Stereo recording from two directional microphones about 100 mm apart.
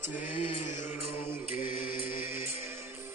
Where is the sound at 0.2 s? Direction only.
20° right (ahead or behind).